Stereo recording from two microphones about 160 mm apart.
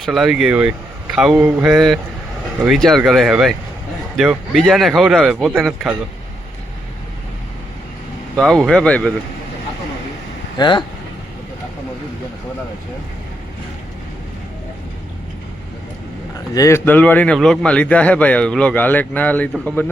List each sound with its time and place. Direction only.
0.0 s a man's voice: centre (ahead or behind)
8.4 s a man's voice: 5° left (ahead or behind)
10.6 s speech: 30° left (ahead or behind)
16.6 s a man's voice: 15° left (ahead or behind)